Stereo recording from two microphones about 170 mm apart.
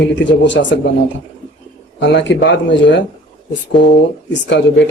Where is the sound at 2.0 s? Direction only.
90° left.